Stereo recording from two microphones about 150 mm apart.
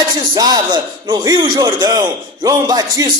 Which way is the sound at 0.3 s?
30° right (ahead or behind).